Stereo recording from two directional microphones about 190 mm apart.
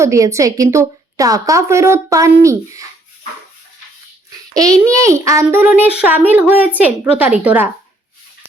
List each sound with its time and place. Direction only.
0.0 s a woman's voice: 15° right (ahead or behind)
4.5 s a child's voice: 20° right (ahead or behind)